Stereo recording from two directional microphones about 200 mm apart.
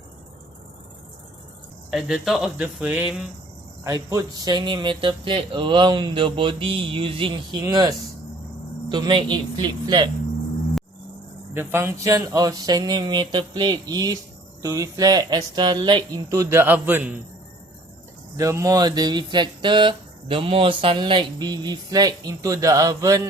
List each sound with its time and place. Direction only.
1.9 s speech: centre (ahead or behind)
3.8 s speech: 15° right (ahead or behind)
11.5 s speech: 10° right (ahead or behind)
18.3 s speech: 15° right (ahead or behind)